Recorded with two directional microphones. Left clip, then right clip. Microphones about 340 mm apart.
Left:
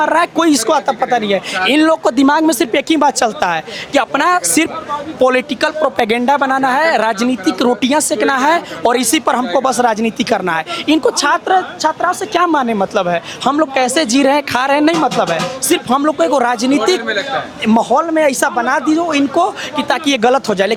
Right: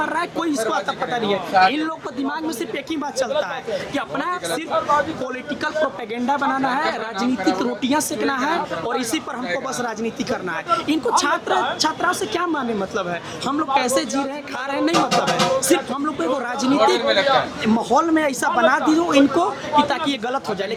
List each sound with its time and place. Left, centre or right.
0.0 s speech: left
6.0 s speech: left
6.2 s a woman's voice: left
12.4 s speech: left
17.9 s speech: left
18.3 s a woman's voice: left
18.5 s speech: left
20.1 s speech: left